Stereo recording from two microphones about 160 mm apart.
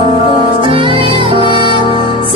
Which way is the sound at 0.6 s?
30° right (ahead or behind).